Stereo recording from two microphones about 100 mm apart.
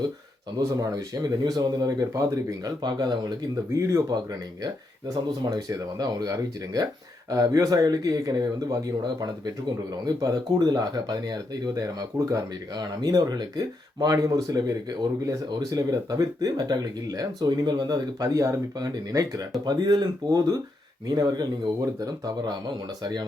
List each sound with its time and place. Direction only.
0.6 s speech: 35° right (ahead or behind)